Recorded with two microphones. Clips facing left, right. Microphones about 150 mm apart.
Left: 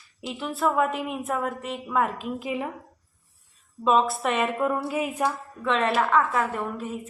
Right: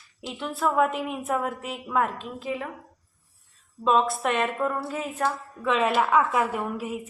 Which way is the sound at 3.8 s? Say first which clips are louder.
Left 1 dB; centre (ahead or behind).